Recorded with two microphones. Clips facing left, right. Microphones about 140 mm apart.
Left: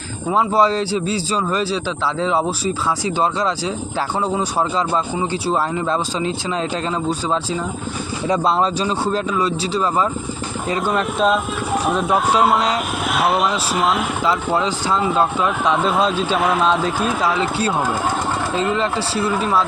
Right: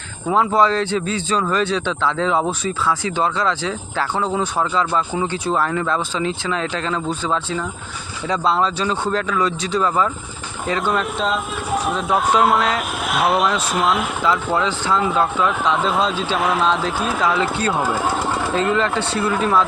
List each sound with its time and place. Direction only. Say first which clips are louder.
0.3 s speech: even; 10° left (ahead or behind)
0.6 s speech: even; 35° left (ahead or behind)
0.9 s speech: even; 10° left (ahead or behind)
4.2 s speech: left 1 dB; 10° left (ahead or behind)
4.7 s a man's voice: even; 30° left (ahead or behind)
10.9 s speech: left 3 dB; centre (ahead or behind)